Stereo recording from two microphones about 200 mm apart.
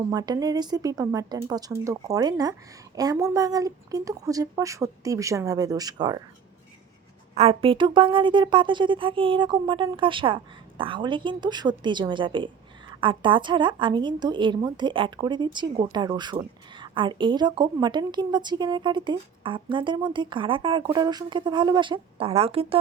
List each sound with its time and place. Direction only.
0.1 s a woman's voice: 20° right (ahead or behind)
7.3 s a woman's voice: 30° right (ahead or behind)